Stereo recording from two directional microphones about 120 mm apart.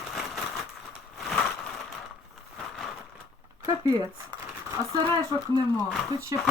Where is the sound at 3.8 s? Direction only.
30° right (ahead or behind).